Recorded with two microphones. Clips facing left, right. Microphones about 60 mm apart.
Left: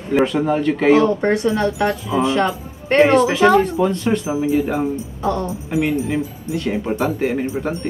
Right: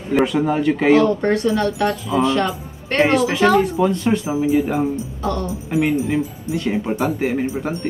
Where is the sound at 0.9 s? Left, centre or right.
Left.